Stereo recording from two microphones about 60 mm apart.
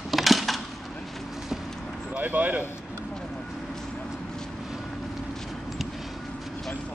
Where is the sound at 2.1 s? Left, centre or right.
Right.